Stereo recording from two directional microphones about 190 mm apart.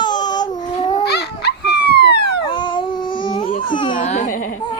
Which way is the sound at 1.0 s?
60° left (ahead or behind).